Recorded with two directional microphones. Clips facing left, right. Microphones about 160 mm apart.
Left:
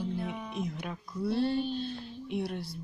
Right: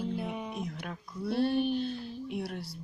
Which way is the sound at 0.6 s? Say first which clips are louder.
Left 2 dB; 5° left (ahead or behind).